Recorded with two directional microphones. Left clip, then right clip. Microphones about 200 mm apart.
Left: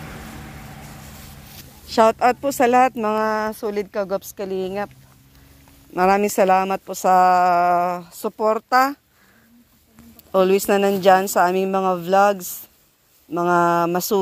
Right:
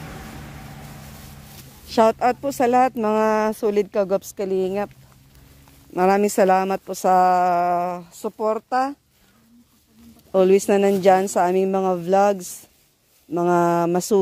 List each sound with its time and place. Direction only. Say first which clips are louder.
1.9 s speech: left 1 dB; 20° right (ahead or behind)
2.1 s speech: left 3 dB; centre (ahead or behind)
2.9 s a woman's voice: even; 25° right (ahead or behind)
4.1 s speech: right 3 dB; 40° right (ahead or behind)
5.9 s a woman's voice: left 1 dB; 25° right (ahead or behind); by 8.9 s centre (ahead or behind)
10.3 s a woman's voice: even; 20° right (ahead or behind)